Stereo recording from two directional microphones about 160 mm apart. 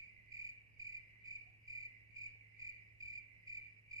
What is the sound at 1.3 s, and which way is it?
Cricket, 25° right (ahead or behind).